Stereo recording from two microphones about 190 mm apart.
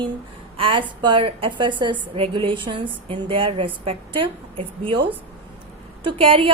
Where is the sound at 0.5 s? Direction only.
30° right (ahead or behind).